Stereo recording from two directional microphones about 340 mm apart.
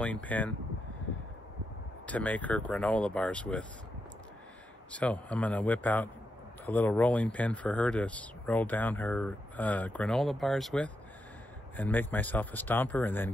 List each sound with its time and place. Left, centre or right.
0.0 s speech: centre
2.0 s speech: centre
4.9 s speech: centre